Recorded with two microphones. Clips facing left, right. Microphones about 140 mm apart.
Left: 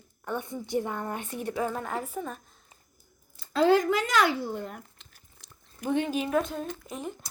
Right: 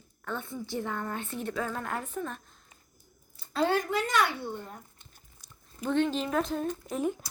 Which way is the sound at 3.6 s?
90° left.